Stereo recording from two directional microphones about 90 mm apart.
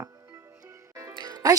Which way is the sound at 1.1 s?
55° right (ahead or behind).